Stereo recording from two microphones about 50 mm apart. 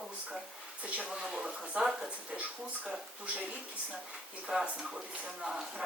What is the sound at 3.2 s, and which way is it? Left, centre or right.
Speech, right.